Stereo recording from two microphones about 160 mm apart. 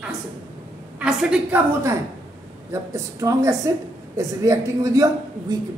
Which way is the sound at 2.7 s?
20° right (ahead or behind).